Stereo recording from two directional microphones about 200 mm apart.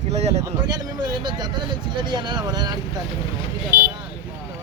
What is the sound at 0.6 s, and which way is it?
Speech, 20° right (ahead or behind).